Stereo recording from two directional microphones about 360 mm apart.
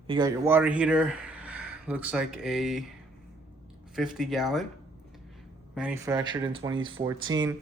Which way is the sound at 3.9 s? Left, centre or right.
Centre.